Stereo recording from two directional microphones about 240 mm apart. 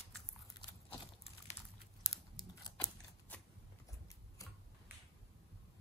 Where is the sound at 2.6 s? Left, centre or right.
Centre.